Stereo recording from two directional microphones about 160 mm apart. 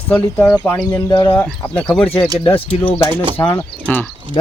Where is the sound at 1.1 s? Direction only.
30° left (ahead or behind).